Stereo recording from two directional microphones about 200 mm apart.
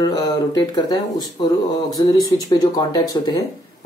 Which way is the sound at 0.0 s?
20° left (ahead or behind).